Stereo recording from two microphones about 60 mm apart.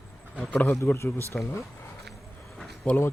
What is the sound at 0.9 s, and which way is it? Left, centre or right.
Speech, left.